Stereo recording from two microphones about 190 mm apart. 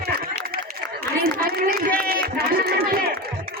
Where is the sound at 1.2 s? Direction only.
50° right (ahead or behind).